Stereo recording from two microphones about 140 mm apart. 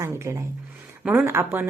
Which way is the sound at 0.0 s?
20° right (ahead or behind).